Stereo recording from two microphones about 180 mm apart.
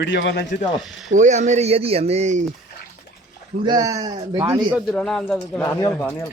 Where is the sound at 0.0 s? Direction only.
85° left.